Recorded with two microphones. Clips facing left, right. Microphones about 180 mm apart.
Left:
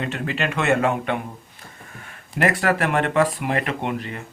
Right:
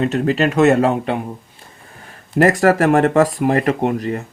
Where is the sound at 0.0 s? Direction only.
40° right (ahead or behind).